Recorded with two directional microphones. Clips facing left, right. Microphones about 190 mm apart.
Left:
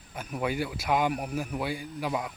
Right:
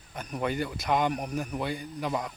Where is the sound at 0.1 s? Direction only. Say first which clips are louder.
Even; 5° left (ahead or behind).